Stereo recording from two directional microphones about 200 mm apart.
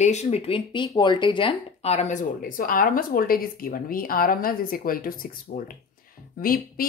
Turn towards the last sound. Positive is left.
turn(degrees=45)  # may be behind; listen again after turning